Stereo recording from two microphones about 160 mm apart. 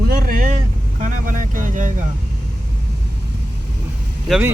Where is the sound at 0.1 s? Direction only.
65° right (ahead or behind).